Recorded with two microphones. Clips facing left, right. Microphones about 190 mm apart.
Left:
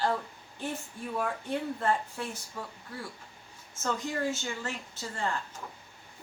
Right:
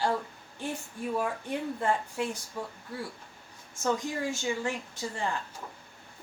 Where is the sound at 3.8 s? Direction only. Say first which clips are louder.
Right 1 dB; 15° right (ahead or behind).